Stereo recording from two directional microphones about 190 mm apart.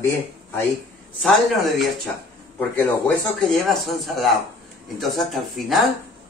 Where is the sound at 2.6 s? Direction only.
5° left (ahead or behind).